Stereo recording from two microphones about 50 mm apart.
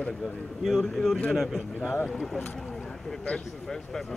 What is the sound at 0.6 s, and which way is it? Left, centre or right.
Speech, centre.